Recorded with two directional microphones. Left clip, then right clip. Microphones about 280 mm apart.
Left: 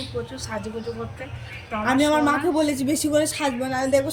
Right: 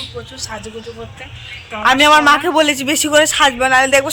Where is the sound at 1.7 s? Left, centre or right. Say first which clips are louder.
Right 11 dB; centre.